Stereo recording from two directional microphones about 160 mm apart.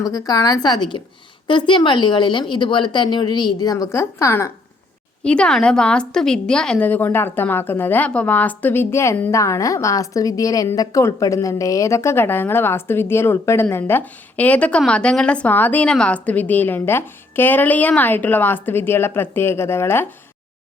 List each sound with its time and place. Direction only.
0.0 s a woman's voice: 20° left (ahead or behind)
5.2 s a woman's voice: 5° left (ahead or behind)